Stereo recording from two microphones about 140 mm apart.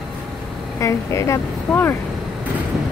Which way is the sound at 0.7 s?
20° left (ahead or behind).